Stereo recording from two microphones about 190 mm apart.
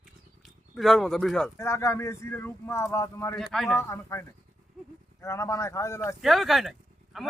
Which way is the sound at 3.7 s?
15° left (ahead or behind).